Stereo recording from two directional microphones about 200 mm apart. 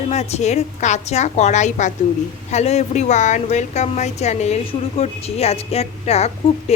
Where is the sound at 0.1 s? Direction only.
35° left (ahead or behind).